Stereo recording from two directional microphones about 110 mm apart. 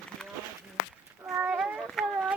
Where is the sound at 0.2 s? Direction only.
5° left (ahead or behind).